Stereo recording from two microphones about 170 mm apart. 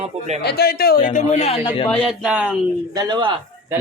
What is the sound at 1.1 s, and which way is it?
Speech, 40° left (ahead or behind).